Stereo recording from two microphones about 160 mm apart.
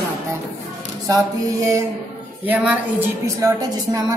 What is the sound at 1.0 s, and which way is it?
Speech, 20° right (ahead or behind).